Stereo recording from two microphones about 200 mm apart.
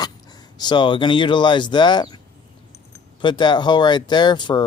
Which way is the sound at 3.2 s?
25° left (ahead or behind).